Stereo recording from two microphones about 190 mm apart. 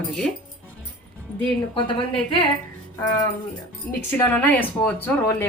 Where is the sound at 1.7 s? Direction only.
25° left (ahead or behind).